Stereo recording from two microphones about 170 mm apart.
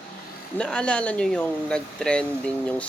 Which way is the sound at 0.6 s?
5° left (ahead or behind).